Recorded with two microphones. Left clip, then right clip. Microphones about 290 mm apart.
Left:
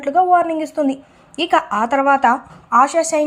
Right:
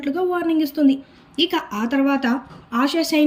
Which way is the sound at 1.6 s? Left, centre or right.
Centre.